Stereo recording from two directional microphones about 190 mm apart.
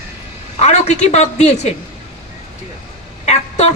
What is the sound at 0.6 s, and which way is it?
Speech, 35° left (ahead or behind).